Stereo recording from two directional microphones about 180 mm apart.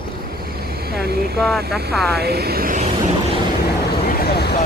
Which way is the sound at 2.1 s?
60° right (ahead or behind).